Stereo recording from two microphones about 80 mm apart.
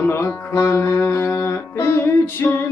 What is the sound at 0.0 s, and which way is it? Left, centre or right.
Speech, left.